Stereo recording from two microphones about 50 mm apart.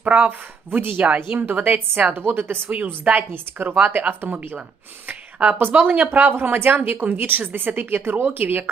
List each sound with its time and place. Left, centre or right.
0.0 s speech: right
0.3 s a woman's voice: right
1.0 s speech: right
1.4 s a woman's voice: right
2.6 s a woman's voice: right